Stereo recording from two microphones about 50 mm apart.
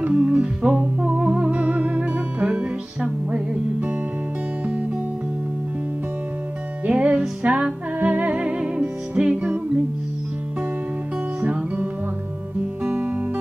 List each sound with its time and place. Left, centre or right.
0.1 s music: right
6.9 s music: right
11.4 s music: right